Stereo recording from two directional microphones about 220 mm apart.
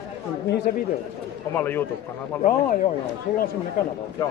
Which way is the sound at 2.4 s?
35° left (ahead or behind).